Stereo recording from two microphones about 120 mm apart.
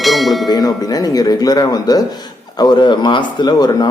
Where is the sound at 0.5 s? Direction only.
35° left (ahead or behind).